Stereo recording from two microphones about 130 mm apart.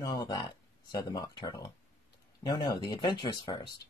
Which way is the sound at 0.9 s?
30° left (ahead or behind).